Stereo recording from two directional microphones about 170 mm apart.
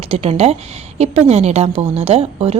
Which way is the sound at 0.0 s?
35° right (ahead or behind).